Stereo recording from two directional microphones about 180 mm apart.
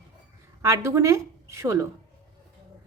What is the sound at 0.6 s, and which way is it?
Speech, 15° right (ahead or behind).